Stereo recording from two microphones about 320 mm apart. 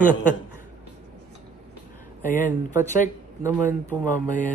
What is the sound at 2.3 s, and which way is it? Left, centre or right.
Speech, centre.